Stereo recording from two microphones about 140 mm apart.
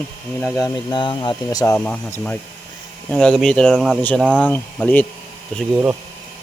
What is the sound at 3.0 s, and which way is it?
Speech, 5° left (ahead or behind).